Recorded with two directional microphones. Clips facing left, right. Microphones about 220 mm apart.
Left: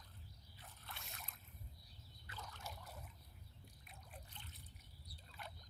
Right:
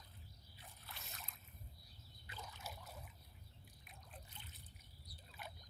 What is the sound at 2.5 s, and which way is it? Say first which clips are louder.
Water: even; 5° right (ahead or behind).